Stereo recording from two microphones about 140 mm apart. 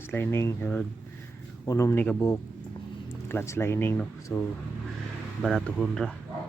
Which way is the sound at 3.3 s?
20° left (ahead or behind).